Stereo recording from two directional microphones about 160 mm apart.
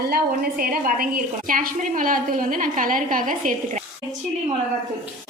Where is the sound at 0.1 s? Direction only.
65° right (ahead or behind).